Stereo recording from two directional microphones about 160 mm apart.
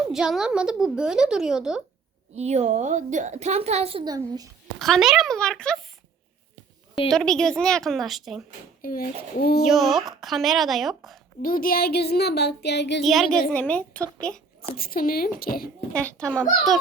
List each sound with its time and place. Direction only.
0.1 s speech: 5° right (ahead or behind)
2.3 s a woman's voice: 45° right (ahead or behind)
4.0 s a child's voice: 25° right (ahead or behind)
4.8 s speech: centre (ahead or behind)
7.1 s speech: 5° left (ahead or behind)
8.8 s a woman's voice: 65° left (ahead or behind)
9.6 s speech: centre (ahead or behind)
11.4 s a sound: 60° left (ahead or behind); by 13.0 s 90° left
13.0 s a woman's voice: centre (ahead or behind)
14.8 s a woman's voice: 65° left (ahead or behind)
15.9 s speech: 5° left (ahead or behind)